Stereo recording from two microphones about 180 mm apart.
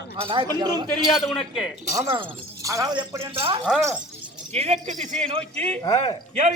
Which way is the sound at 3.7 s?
5° right (ahead or behind).